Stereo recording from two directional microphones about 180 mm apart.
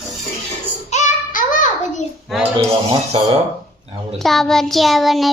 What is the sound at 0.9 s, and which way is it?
Child singing, 45° left (ahead or behind).